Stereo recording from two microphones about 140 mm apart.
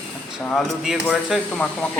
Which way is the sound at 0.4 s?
5° left (ahead or behind).